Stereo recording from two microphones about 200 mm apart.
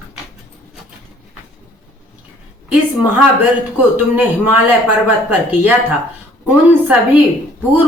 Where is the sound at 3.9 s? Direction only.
10° right (ahead or behind).